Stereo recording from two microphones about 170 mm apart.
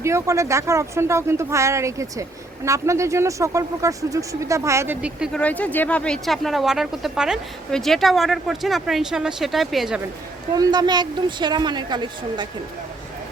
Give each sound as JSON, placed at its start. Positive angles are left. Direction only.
{"t": 0.0, "sound": "speech", "side_deg": -15}
{"t": 5.3, "sound": "speech", "side_deg": 10}
{"t": 10.5, "sound": "a woman's voice", "side_deg": -25}